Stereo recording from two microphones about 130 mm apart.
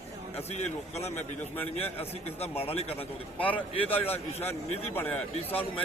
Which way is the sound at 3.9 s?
50° left (ahead or behind).